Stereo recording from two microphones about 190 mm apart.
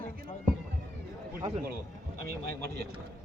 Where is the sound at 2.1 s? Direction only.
55° right (ahead or behind).